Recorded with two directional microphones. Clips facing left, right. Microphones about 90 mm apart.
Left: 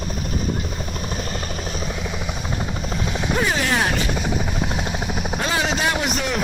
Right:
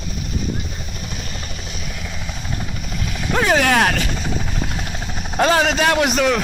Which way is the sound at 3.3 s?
70° right (ahead or behind).